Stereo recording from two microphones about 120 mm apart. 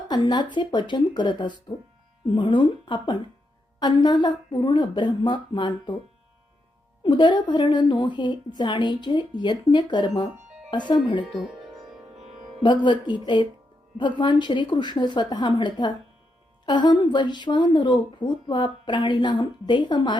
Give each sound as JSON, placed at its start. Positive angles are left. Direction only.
{"t": 0.1, "sound": "speech", "side_deg": 40}
{"t": 7.0, "sound": "speech", "side_deg": 40}
{"t": 11.2, "sound": "speech", "side_deg": -5}
{"t": 12.6, "sound": "speech", "side_deg": 40}